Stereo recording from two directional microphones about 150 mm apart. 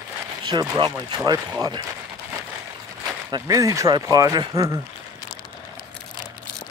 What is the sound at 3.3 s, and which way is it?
Speech, 25° right (ahead or behind).